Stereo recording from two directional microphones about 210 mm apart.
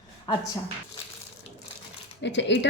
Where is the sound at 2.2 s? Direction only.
55° left (ahead or behind).